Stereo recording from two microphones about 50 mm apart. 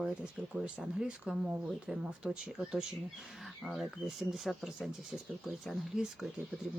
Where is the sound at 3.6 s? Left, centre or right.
Centre.